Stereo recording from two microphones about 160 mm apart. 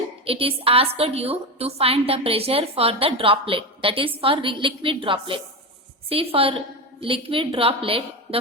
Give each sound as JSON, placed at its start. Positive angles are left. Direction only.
{"t": 0.3, "sound": "a woman's voice", "side_deg": -35}